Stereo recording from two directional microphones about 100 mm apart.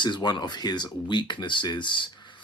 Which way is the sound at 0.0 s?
45° left (ahead or behind).